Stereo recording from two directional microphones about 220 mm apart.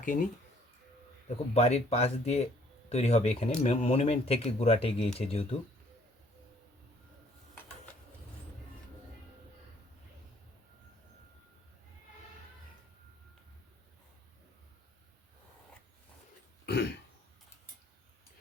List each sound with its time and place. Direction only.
0.0 s speech: 40° left (ahead or behind)
1.5 s speech: 30° left (ahead or behind)
16.6 s throat clearing: 50° left (ahead or behind)